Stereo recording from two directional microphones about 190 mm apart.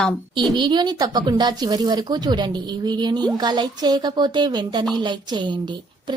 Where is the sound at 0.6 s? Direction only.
25° right (ahead or behind).